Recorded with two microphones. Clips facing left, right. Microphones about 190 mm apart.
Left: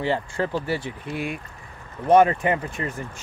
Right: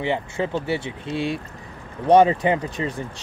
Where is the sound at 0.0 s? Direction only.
20° right (ahead or behind).